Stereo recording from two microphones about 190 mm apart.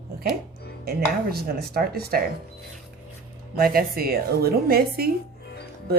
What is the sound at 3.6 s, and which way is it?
A woman's voice, 50° right (ahead or behind).